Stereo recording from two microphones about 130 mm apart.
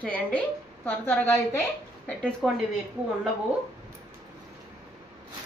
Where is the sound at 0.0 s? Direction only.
10° left (ahead or behind).